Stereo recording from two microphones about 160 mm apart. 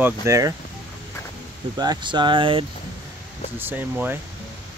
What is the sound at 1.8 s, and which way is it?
Speech, 25° right (ahead or behind).